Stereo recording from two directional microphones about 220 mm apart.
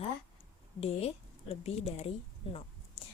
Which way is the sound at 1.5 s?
30° left (ahead or behind).